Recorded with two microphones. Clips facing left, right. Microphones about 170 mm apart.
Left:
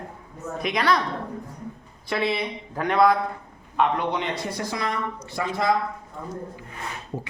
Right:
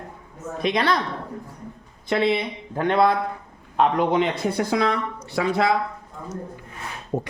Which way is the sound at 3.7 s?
40° right (ahead or behind).